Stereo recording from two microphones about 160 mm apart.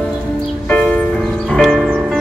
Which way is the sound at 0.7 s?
10° left (ahead or behind).